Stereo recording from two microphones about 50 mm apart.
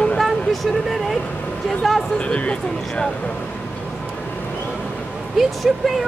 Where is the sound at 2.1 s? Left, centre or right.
Left.